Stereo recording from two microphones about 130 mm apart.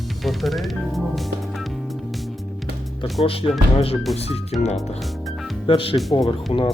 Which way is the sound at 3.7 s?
50° left (ahead or behind).